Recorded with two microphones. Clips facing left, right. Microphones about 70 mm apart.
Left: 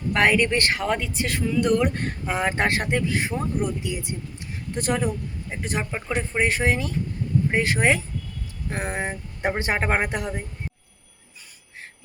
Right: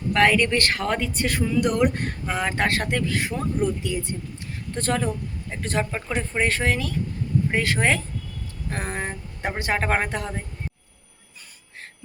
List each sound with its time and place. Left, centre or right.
0.1 s speech: left
0.8 s speech: centre
1.6 s speech: centre
2.2 s speech: centre
6.1 s a woman's voice: centre